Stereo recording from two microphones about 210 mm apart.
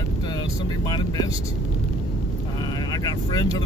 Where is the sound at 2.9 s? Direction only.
15° left (ahead or behind).